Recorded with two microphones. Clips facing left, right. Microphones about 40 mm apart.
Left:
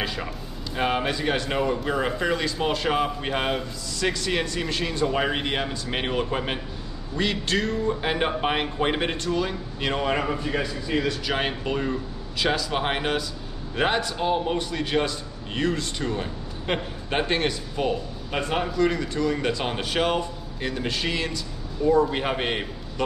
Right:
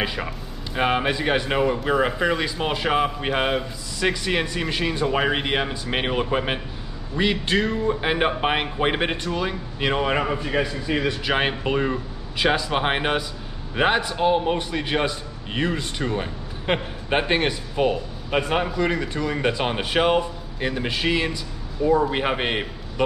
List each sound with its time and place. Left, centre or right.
0.0 s a man's voice: centre